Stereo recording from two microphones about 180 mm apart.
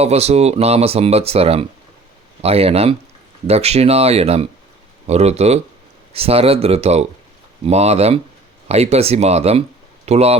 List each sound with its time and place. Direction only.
0.0 s speech: 35° right (ahead or behind)